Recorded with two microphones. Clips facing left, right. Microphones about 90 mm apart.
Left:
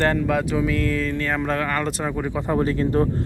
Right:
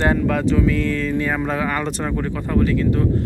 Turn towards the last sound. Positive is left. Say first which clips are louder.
# right 1 dB
turn(degrees=35)  # may be behind; listen again after turning